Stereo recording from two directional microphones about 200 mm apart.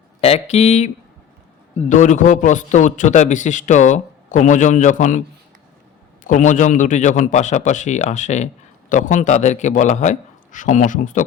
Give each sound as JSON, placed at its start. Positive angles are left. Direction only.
{"t": 0.2, "sound": "a man's voice", "side_deg": 30}
{"t": 1.9, "sound": "a man's voice", "side_deg": 40}
{"t": 6.2, "sound": "a man's voice", "side_deg": 40}